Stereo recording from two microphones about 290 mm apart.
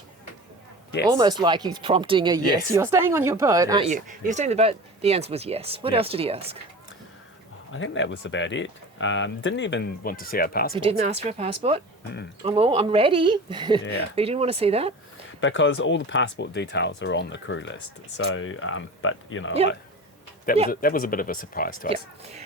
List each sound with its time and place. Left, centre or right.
1.1 s speech: centre
3.8 s speech: right
7.7 s speech: left
10.8 s speech: right
15.4 s speech: left
20.7 s speech: left
21.8 s speech: right